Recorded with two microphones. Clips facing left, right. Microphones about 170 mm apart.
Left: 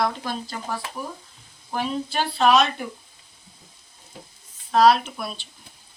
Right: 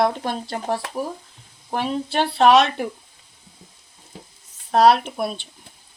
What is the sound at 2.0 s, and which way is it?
Speech, 75° right (ahead or behind).